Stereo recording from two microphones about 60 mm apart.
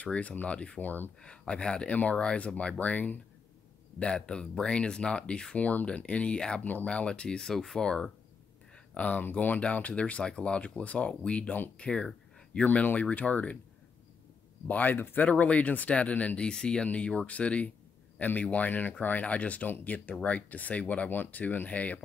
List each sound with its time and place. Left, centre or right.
0.0 s speech: left
1.2 s speech: centre
8.9 s speech: left
14.7 s speech: left